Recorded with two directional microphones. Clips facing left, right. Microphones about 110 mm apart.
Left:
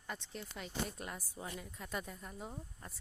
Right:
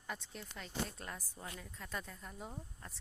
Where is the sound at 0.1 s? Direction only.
Centre (ahead or behind).